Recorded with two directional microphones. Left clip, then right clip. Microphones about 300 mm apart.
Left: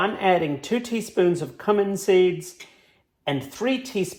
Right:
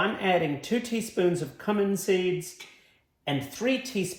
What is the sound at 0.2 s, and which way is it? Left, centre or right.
Speech, centre.